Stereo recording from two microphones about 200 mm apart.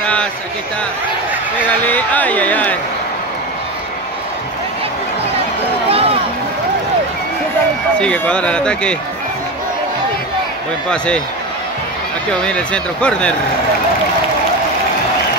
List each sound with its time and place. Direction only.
0.0 s a sound: 5° left (ahead or behind)
1.9 s speech: 5° left (ahead or behind)
5.9 s a sound: 30° right (ahead or behind)
8.0 s speech: 5° left (ahead or behind)
10.9 s speech: 5° left (ahead or behind)
12.3 s speech: 5° left (ahead or behind)